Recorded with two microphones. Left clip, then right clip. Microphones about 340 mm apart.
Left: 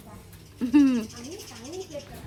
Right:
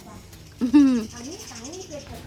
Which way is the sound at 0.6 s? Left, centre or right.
Centre.